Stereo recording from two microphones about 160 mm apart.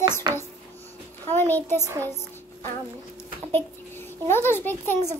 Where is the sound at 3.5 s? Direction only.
15° left (ahead or behind).